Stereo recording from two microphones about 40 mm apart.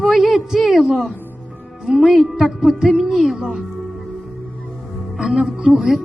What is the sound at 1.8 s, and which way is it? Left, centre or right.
Speech, centre.